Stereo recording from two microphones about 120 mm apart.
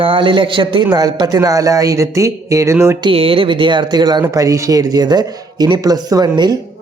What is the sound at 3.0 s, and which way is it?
Speech, 50° right (ahead or behind).